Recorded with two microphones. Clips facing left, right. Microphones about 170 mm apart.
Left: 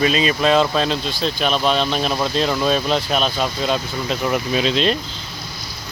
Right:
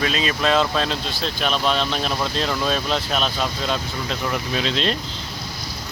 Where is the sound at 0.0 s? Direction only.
5° left (ahead or behind).